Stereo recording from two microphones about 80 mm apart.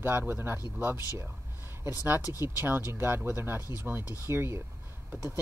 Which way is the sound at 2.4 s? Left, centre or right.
Right.